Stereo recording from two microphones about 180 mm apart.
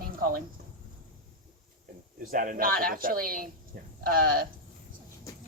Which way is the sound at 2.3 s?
50° right (ahead or behind).